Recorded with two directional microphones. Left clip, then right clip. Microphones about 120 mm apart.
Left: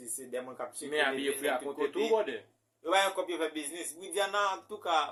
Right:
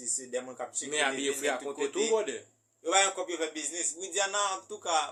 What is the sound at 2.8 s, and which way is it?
A man's voice, 35° left (ahead or behind).